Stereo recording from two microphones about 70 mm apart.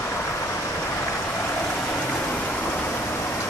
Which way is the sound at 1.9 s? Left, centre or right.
Left.